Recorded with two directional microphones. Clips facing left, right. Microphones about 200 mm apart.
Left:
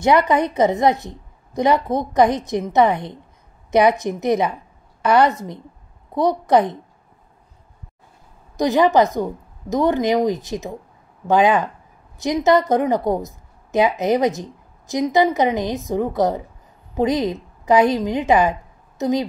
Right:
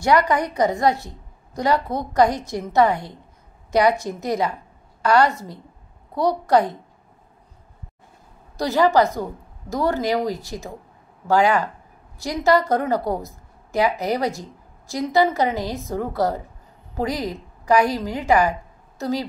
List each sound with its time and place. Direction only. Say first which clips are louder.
0.0 s a woman's voice: left 3 dB; 20° left (ahead or behind)
8.5 s a woman's voice: left 2 dB; 20° left (ahead or behind)